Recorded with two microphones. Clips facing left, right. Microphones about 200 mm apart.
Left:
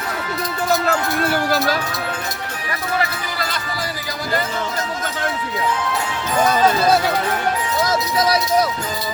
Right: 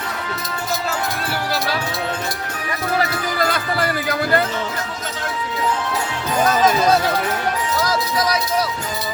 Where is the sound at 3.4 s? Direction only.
55° right (ahead or behind).